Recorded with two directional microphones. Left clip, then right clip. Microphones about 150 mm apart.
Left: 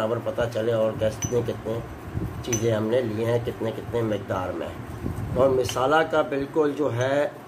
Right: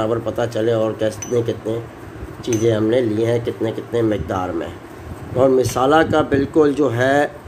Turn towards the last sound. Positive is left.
turn(degrees=-55)  # may be behind; listen again after turning